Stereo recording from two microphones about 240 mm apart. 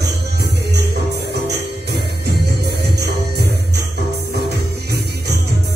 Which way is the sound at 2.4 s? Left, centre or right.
Right.